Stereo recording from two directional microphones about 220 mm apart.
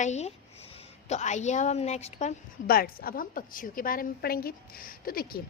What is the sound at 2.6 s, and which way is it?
A woman's voice, 40° left (ahead or behind).